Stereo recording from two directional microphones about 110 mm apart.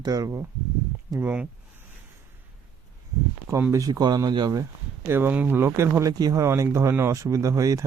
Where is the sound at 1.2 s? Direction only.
15° right (ahead or behind).